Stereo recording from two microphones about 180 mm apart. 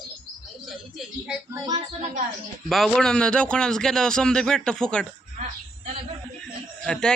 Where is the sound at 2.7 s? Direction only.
Centre (ahead or behind).